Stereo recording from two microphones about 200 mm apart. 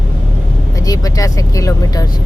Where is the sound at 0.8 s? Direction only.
20° left (ahead or behind).